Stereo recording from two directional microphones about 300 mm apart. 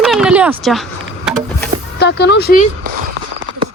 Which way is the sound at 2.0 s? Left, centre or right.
Left.